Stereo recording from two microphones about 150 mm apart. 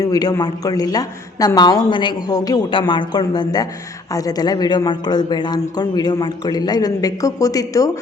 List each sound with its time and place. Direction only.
0.0 s speech: 25° left (ahead or behind)